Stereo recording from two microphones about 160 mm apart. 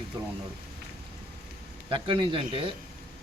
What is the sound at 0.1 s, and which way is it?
Speech, 25° right (ahead or behind).